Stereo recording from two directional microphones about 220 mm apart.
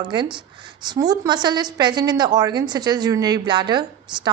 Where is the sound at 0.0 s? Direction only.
20° right (ahead or behind).